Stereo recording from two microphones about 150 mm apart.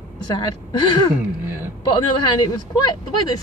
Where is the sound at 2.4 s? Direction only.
30° left (ahead or behind).